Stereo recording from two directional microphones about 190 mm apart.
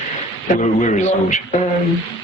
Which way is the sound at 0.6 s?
40° left (ahead or behind).